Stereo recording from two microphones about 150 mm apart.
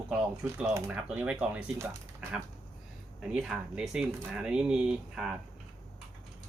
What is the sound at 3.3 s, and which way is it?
A man's voice, 5° right (ahead or behind).